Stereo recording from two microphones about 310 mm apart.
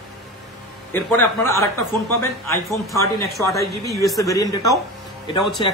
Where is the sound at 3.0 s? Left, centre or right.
Centre.